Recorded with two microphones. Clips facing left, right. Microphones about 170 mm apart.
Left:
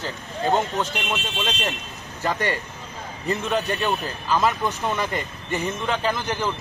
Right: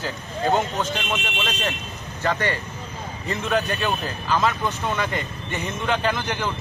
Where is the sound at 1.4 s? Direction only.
20° left (ahead or behind).